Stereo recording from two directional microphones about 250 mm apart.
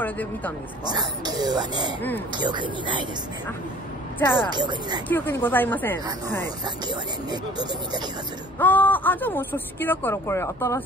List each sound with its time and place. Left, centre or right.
0.0 s speech: centre
0.9 s speech: centre
4.4 s speech: centre
5.0 s speech: centre
6.6 s speech: centre
8.5 s speech: centre